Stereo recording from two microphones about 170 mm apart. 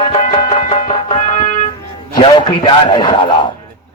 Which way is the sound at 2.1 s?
30° left (ahead or behind).